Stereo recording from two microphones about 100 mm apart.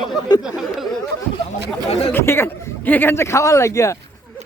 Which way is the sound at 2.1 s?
25° left (ahead or behind).